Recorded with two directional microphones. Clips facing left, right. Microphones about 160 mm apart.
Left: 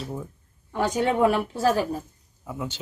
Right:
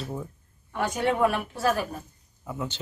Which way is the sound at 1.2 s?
25° left (ahead or behind).